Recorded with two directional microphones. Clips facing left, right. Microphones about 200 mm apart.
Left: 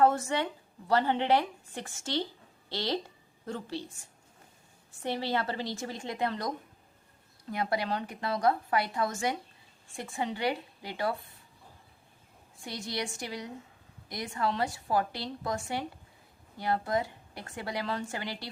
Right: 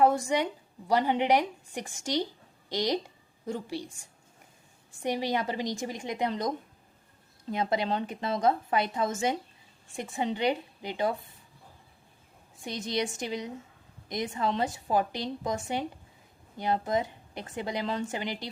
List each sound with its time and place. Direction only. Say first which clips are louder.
0.0 s a woman's voice: right 2 dB; 15° right (ahead or behind)
5.0 s a woman's voice: right 2 dB; 15° right (ahead or behind)
7.5 s a woman's voice: right 3 dB; 20° right (ahead or behind)
12.6 s a woman's voice: right 5 dB; 20° right (ahead or behind)